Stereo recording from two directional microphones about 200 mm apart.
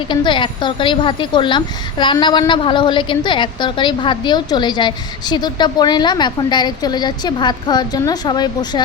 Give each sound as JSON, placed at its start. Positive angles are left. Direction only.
{"t": 0.1, "sound": "a woman's voice", "side_deg": 25}